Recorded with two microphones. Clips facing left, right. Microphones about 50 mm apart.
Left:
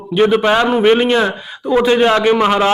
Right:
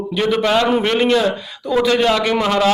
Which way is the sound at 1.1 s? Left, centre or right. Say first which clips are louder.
Left 1 dB; left.